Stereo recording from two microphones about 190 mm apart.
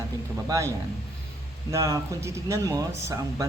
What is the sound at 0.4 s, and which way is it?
Speech, 15° right (ahead or behind).